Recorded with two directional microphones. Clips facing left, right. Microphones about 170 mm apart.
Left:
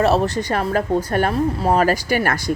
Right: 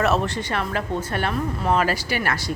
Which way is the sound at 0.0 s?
35° left (ahead or behind).